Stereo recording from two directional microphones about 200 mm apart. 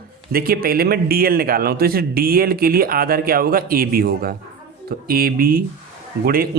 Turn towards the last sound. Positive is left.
turn(degrees=-45)  # may be behind; listen again after turning